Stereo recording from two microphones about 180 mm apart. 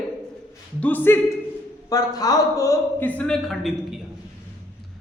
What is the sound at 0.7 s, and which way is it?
Speech, 10° left (ahead or behind).